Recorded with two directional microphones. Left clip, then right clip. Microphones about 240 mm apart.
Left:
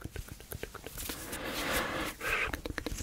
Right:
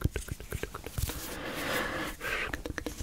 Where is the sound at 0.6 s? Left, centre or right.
Right.